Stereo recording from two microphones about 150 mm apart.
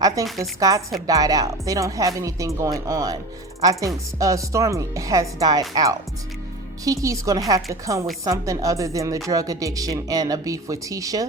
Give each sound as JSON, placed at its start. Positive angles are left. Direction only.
{"t": 0.3, "sound": "speech", "side_deg": -20}